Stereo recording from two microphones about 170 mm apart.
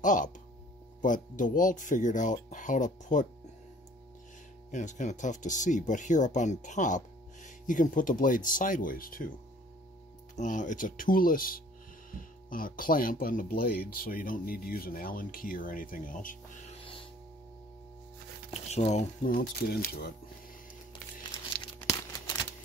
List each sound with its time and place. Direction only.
0.0 s speech: 50° left (ahead or behind)
4.6 s speech: 45° left (ahead or behind)
10.3 s speech: 50° left (ahead or behind)
18.5 s speech: 40° left (ahead or behind)
19.2 s speech: 60° left (ahead or behind)